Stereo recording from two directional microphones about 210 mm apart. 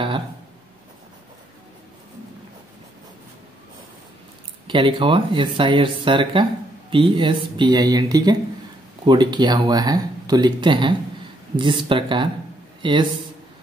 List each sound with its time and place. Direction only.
4.6 s speech: 25° right (ahead or behind)